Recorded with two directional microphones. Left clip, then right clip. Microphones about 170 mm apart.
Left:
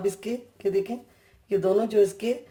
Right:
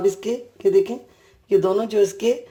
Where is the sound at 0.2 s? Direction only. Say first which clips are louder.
Right 7 dB; 25° right (ahead or behind).